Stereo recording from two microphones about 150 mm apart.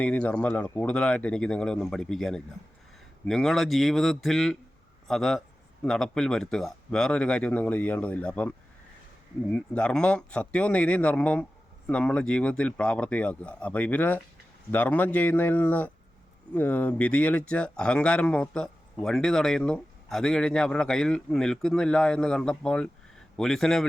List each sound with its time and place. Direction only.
0.0 s speech: 10° left (ahead or behind)